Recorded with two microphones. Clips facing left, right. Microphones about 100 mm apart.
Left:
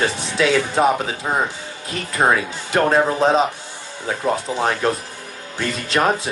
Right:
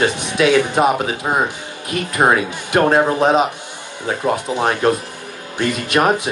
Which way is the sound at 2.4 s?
20° right (ahead or behind).